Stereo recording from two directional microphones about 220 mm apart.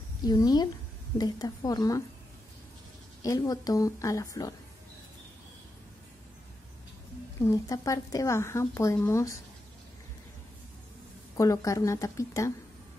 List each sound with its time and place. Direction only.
0.2 s speech: 20° left (ahead or behind)
3.2 s speech: 15° left (ahead or behind)
7.4 s speech: 15° left (ahead or behind)
11.3 s speech: 15° left (ahead or behind)